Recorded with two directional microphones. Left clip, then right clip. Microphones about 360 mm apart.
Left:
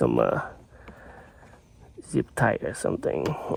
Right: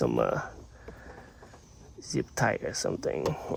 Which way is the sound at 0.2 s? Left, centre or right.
Left.